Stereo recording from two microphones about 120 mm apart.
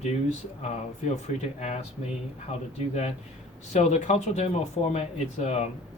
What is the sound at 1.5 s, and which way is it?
Speech, 65° left (ahead or behind).